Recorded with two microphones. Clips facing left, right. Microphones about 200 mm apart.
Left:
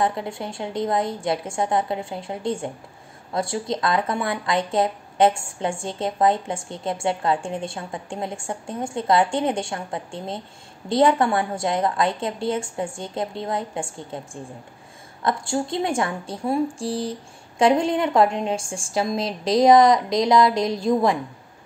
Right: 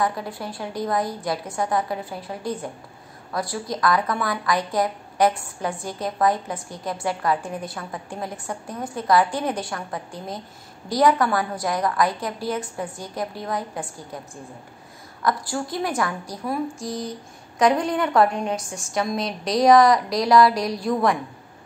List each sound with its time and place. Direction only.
0.0 s a woman's voice: 25° left (ahead or behind)
16.7 s a sound: 30° left (ahead or behind)
17.6 s a woman's voice: 25° left (ahead or behind)